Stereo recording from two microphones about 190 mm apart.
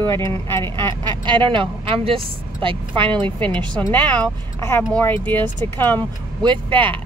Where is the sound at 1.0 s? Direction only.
25° right (ahead or behind).